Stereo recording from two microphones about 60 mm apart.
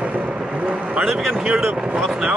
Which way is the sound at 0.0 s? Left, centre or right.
Right.